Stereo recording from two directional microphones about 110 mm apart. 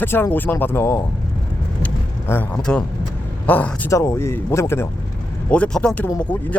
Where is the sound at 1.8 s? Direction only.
15° left (ahead or behind).